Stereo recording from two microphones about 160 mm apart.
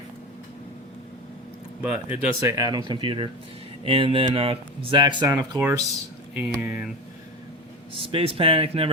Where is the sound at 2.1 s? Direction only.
15° right (ahead or behind).